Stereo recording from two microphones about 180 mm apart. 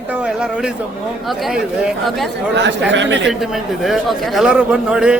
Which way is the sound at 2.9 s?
90° right.